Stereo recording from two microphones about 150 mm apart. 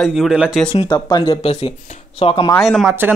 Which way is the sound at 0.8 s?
30° left (ahead or behind).